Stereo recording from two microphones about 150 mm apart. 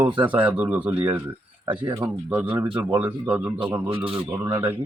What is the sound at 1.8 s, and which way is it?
Speech, 30° right (ahead or behind).